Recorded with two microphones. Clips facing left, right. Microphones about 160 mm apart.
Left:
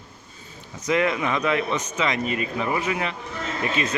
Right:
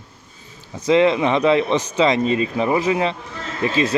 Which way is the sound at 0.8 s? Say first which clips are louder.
Right 7 dB; 25° right (ahead or behind).